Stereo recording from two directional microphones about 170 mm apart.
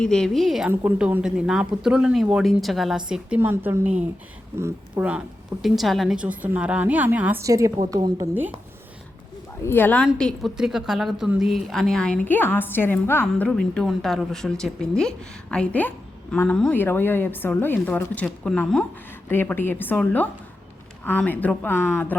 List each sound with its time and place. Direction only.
0.0 s speech: 5° left (ahead or behind)
0.7 s a woman's voice: 10° right (ahead or behind)
9.6 s a woman's voice: 10° left (ahead or behind)